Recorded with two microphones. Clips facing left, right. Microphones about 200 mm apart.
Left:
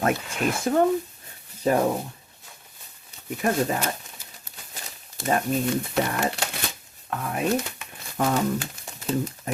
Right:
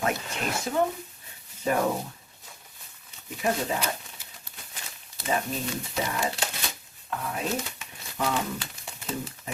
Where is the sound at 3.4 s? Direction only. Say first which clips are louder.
Left 4 dB; 45° left (ahead or behind).